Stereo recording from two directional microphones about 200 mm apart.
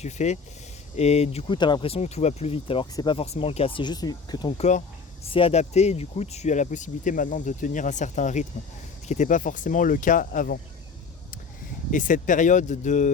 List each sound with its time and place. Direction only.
0.0 s speech: 35° left (ahead or behind)
11.9 s speech: 40° left (ahead or behind)